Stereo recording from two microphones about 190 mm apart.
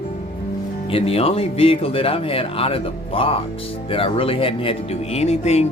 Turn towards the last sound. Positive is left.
turn(degrees=35)  # may be behind; listen again after turning